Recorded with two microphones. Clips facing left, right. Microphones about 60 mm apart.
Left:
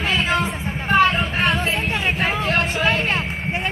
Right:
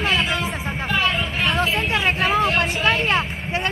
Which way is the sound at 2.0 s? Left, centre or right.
Right.